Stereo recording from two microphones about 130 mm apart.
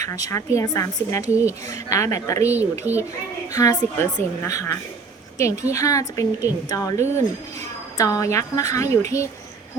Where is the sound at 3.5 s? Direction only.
25° left (ahead or behind).